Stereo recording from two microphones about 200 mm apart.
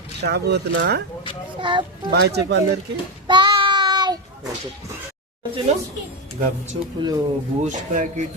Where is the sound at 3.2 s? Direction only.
25° right (ahead or behind).